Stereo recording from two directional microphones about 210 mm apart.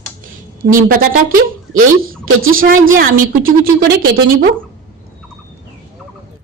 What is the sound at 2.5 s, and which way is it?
A woman's voice, 40° right (ahead or behind).